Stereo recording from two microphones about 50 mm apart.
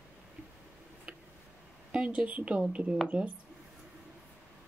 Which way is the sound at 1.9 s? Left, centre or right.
Right.